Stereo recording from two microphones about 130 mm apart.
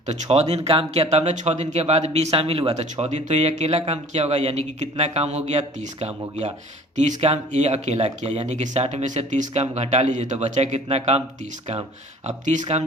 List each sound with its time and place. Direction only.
0.1 s a man's voice: 55° right (ahead or behind)
6.9 s a man's voice: 70° right (ahead or behind); by 11.2 s 50° right (ahead or behind)
12.2 s a man's voice: 65° right (ahead or behind)